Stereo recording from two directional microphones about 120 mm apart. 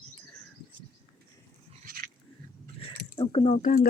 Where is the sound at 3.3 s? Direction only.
60° left (ahead or behind).